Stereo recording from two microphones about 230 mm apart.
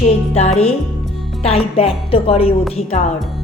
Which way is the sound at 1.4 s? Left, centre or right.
Left.